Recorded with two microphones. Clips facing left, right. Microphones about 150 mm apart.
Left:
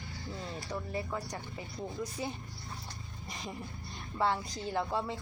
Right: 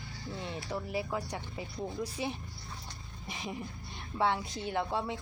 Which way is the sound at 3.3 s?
5° right (ahead or behind).